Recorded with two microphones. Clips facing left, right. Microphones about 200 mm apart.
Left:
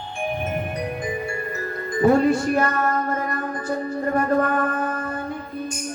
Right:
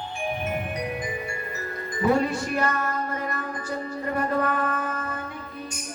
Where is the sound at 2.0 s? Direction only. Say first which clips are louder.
Left 6 dB; 45° left (ahead or behind).